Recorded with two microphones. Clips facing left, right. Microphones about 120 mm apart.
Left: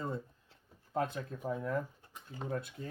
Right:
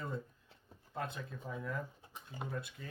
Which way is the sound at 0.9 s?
40° left (ahead or behind).